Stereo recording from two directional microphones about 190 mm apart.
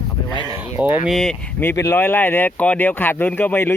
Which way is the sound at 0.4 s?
10° right (ahead or behind).